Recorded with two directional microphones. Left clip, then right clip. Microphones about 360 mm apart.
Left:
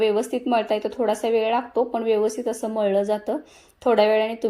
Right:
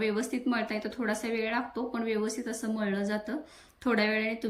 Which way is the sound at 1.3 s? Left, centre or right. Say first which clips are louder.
Left 11 dB; left.